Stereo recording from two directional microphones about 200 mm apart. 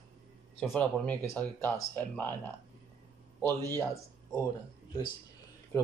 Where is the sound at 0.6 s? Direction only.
5° left (ahead or behind).